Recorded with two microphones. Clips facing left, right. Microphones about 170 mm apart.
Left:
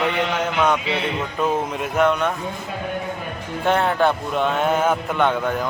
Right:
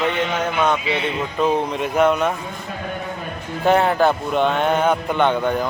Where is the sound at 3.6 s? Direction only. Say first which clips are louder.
Right 3 dB; centre (ahead or behind).